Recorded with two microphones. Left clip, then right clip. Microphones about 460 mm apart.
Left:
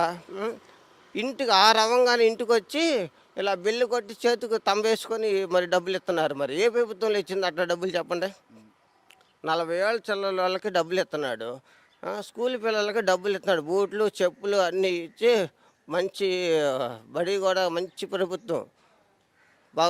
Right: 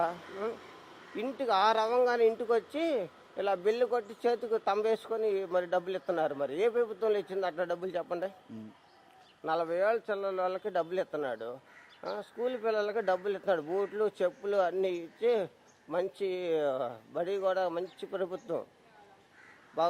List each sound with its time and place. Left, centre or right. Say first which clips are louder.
0.0 s speech: left 5 dB; left
9.4 s speech: left 4 dB; left